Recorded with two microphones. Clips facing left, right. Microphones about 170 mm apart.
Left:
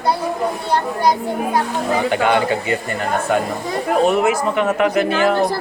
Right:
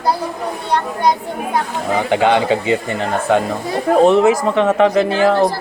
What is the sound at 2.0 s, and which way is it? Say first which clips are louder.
Speech: right 4 dB; 20° right (ahead or behind).